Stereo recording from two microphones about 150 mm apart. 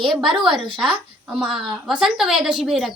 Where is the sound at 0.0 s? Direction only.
Centre (ahead or behind).